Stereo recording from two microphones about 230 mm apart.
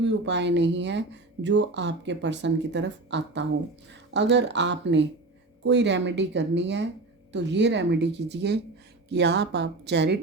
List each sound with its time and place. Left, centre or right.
0.0 s speech: right